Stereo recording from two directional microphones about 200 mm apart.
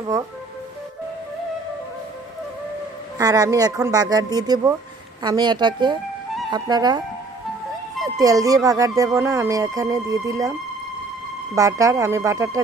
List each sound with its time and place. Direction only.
3.2 s speech: 20° right (ahead or behind)
8.2 s speech: 15° right (ahead or behind)
11.5 s speech: 15° right (ahead or behind)